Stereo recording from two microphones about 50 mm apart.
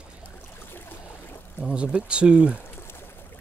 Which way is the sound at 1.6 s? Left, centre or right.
Right.